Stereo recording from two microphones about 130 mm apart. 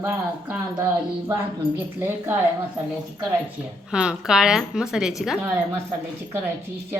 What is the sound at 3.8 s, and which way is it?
A woman's voice, 5° right (ahead or behind).